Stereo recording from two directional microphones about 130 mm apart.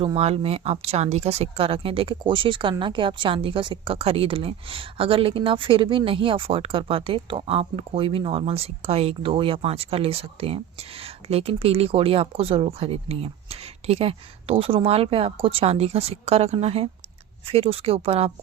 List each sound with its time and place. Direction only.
0.2 s speech: 50° right (ahead or behind)